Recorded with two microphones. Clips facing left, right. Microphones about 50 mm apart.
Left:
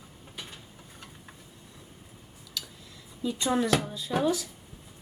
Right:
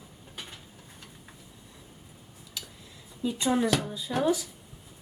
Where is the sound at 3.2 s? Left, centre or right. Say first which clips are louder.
Right 1 dB; centre.